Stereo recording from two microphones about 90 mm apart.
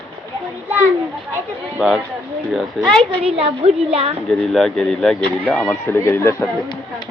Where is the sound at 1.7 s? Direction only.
5° right (ahead or behind).